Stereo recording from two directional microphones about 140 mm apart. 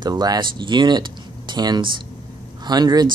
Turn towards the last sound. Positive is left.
turn(degrees=-30)  # may be behind; listen again after turning